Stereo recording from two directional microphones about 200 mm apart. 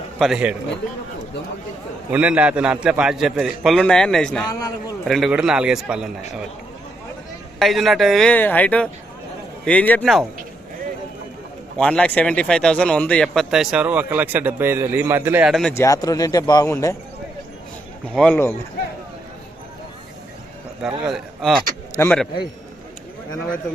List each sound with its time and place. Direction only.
0.2 s speech: 5° right (ahead or behind)
2.1 s speech: 5° right (ahead or behind)
4.5 s speech: 20° left (ahead or behind)
5.0 s speech: centre (ahead or behind)
7.6 s speech: centre (ahead or behind)
11.8 s speech: 5° left (ahead or behind)
15.7 s speech: 15° left (ahead or behind)
18.1 s speech: 5° left (ahead or behind)
20.8 s speech: centre (ahead or behind)
21.9 s speech: 10° left (ahead or behind)